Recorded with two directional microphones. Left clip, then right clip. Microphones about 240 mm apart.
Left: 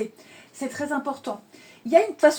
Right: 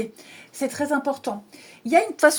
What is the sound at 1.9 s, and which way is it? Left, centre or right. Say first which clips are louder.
Speech: even; right.